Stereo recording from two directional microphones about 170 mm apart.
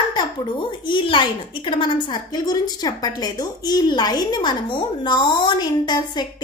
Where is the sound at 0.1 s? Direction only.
25° left (ahead or behind).